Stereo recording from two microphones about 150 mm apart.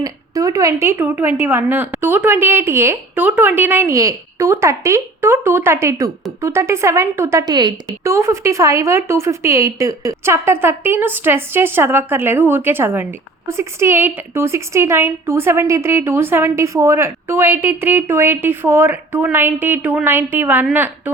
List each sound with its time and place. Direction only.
0.0 s a woman's voice: 20° right (ahead or behind)